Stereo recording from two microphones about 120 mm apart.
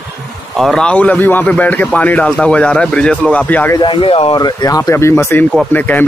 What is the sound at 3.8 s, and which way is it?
Speech, 45° left (ahead or behind).